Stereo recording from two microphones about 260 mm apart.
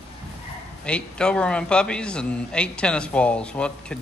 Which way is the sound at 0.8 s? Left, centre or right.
Centre.